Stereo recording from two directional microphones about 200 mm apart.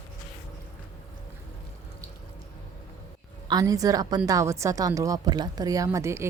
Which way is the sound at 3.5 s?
20° right (ahead or behind).